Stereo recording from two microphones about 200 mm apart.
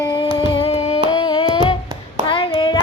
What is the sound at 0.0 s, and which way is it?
Music, 25° left (ahead or behind).